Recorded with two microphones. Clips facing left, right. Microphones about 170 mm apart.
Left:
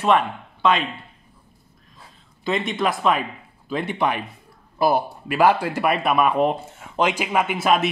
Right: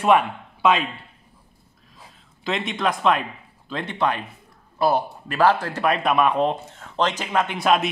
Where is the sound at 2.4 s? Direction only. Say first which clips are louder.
Left 2 dB; centre (ahead or behind).